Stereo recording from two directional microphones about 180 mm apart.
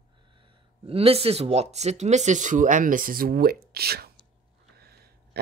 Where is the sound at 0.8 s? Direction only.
35° right (ahead or behind).